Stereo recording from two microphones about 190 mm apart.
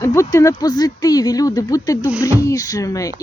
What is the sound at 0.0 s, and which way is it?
Speech, 15° left (ahead or behind).